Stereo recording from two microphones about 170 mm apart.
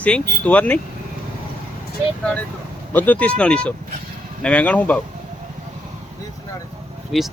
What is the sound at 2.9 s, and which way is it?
Speech, 10° left (ahead or behind).